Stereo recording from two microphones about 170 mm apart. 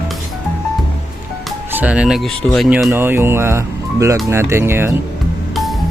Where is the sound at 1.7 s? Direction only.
5° right (ahead or behind).